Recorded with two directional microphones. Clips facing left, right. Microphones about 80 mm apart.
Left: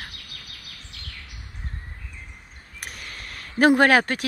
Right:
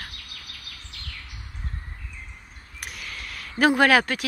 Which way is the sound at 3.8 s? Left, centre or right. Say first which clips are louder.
Left 1 dB; left.